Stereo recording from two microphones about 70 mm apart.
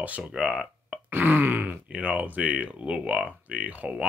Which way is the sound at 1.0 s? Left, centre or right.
Right.